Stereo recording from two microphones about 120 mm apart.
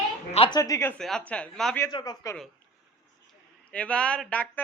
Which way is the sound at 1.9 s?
30° left (ahead or behind).